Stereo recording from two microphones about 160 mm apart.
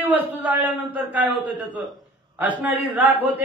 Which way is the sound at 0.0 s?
10° right (ahead or behind).